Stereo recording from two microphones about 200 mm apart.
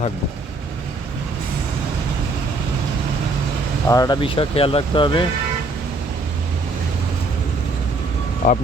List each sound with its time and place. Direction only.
3.8 s speech: 15° left (ahead or behind)
8.4 s speech: 40° left (ahead or behind)